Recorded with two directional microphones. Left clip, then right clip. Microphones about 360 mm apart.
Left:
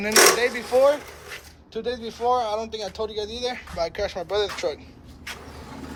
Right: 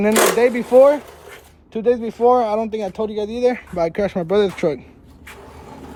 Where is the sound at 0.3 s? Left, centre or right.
Centre.